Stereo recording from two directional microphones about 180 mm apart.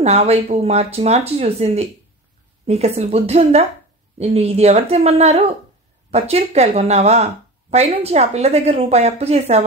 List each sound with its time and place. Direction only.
0.0 s a woman's voice: 35° right (ahead or behind)